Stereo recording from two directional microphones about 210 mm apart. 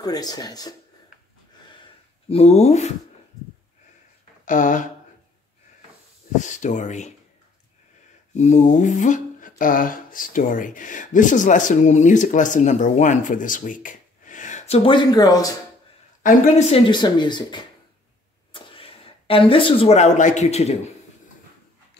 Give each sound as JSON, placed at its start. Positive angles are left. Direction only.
{"t": 0.0, "sound": "speech", "side_deg": 20}
{"t": 2.2, "sound": "speech", "side_deg": 30}
{"t": 4.5, "sound": "speech", "side_deg": 40}
{"t": 6.3, "sound": "speech", "side_deg": 35}
{"t": 8.4, "sound": "speech", "side_deg": 35}
{"t": 16.2, "sound": "speech", "side_deg": 35}